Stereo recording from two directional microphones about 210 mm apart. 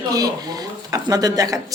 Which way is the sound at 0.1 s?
20° right (ahead or behind).